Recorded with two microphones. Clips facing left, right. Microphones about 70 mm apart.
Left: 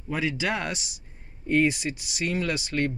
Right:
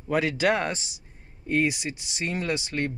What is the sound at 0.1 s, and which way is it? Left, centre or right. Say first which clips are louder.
Speech: right 4 dB; right.